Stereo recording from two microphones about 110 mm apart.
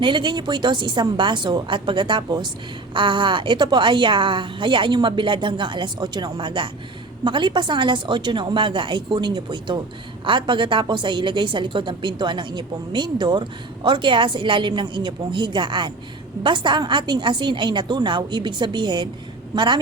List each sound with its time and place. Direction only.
0.0 s a woman's voice: 45° right (ahead or behind)